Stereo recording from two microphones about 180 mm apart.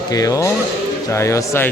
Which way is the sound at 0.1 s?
20° left (ahead or behind).